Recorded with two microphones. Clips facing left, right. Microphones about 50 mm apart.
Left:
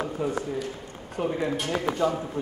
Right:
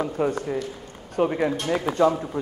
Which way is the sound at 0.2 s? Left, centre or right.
Right.